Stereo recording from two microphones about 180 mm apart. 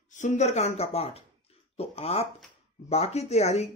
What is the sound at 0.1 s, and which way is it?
Speech, 40° left (ahead or behind).